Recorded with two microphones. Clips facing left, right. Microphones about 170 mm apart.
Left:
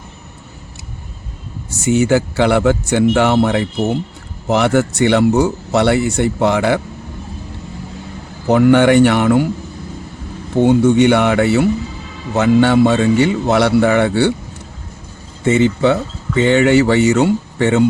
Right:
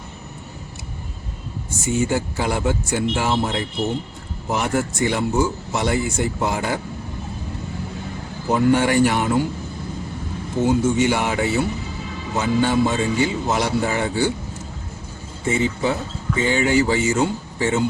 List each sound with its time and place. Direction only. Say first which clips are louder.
1.7 s speech: left 8 dB; 75° left (ahead or behind)
8.4 s speech: left 7 dB; 70° left (ahead or behind)
10.6 s speech: left 7 dB; 65° left (ahead or behind)
15.4 s speech: left 8 dB; 70° left (ahead or behind)